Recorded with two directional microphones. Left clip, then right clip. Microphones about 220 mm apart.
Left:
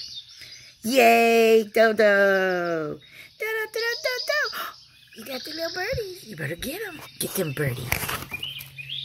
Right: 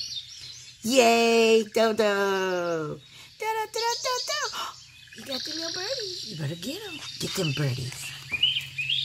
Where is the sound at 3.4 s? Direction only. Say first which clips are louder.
Left 1 dB; 5° left (ahead or behind).